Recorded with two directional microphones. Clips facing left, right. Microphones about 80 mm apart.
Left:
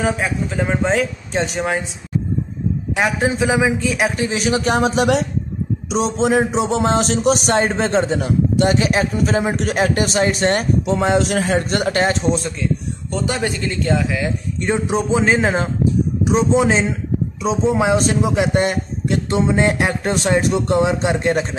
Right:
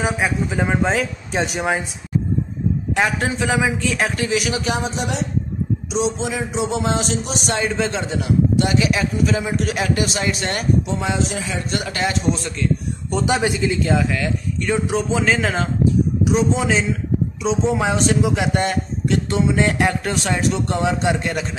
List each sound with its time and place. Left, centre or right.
0.0 s a man's voice: centre
3.0 s speech: centre
3.3 s speech: centre
4.3 s a man's voice: left
4.8 s speech: left
5.9 s a man's voice: left
13.1 s a man's voice: centre
14.1 s a man's voice: left
17.4 s a man's voice: centre